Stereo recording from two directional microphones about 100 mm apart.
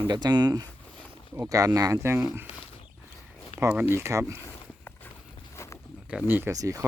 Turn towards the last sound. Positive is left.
turn(degrees=-35)  # may be behind; listen again after turning